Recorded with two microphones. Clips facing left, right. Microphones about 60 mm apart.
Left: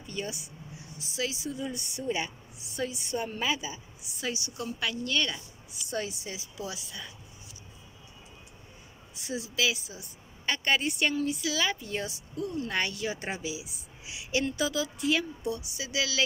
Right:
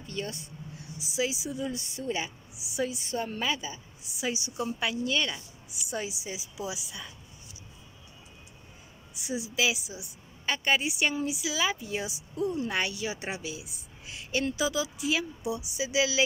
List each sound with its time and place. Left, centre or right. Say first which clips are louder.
0.0 s speech: even; centre
0.9 s a woman's voice: right 3 dB; centre
1.6 s a woman's voice: right 1 dB; centre
4.3 s a woman's voice: right 3 dB; centre
9.2 s a woman's voice: right 1 dB; centre
12.7 s a woman's voice: even; centre
15.5 s speech: right 4 dB; right